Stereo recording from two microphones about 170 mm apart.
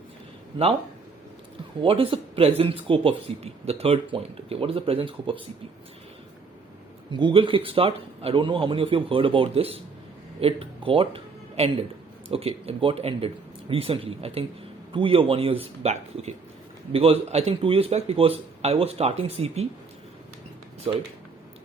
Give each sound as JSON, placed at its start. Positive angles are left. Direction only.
{"t": 1.8, "sound": "speech", "side_deg": -30}
{"t": 7.1, "sound": "speech", "side_deg": -30}